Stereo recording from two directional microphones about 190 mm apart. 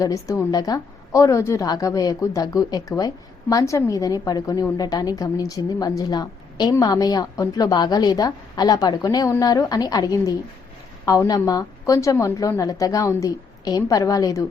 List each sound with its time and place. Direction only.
0.0 s a woman's voice: 15° left (ahead or behind)